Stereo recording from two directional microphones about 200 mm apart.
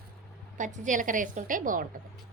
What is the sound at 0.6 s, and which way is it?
A woman's voice, 40° right (ahead or behind).